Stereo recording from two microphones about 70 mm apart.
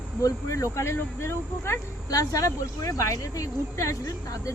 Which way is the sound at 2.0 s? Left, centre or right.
Left.